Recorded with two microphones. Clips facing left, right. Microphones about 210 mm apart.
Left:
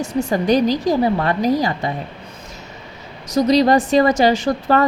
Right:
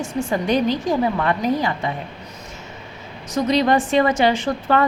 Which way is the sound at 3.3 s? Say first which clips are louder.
Left 4 dB; 35° left (ahead or behind).